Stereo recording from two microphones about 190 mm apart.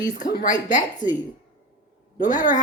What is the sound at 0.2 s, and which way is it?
Speech, 20° left (ahead or behind).